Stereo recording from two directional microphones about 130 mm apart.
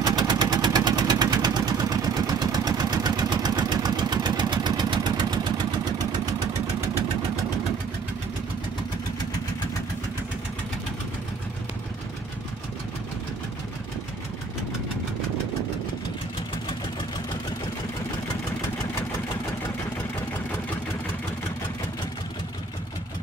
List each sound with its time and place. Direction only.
0.0 s vehicle: 30° right (ahead or behind)